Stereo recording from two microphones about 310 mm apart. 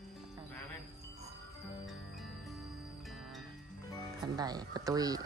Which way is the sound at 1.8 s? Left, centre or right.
Centre.